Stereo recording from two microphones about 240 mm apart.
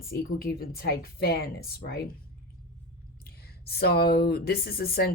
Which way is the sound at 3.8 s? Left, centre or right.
Left.